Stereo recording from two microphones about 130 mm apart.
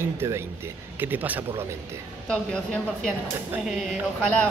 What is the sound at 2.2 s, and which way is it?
Speech, 5° left (ahead or behind).